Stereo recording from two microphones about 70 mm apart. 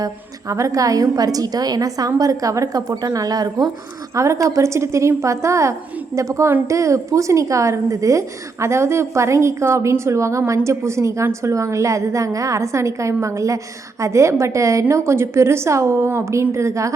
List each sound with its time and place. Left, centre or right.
0.0 s a woman's voice: right
4.1 s a woman's voice: right